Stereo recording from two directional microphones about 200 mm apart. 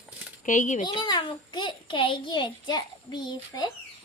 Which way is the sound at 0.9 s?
20° left (ahead or behind).